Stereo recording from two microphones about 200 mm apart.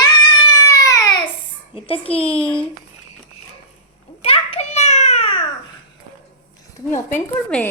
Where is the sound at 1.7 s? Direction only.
30° left (ahead or behind).